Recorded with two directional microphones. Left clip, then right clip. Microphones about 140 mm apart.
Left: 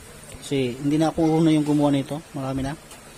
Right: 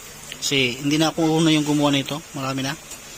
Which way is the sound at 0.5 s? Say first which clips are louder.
Right 3 dB; 10° left (ahead or behind).